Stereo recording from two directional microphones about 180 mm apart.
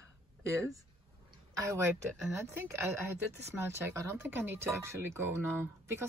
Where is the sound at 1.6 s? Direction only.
15° right (ahead or behind).